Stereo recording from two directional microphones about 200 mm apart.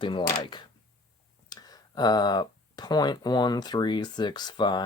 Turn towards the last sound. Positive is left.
turn(degrees=20)  # may be behind; listen again after turning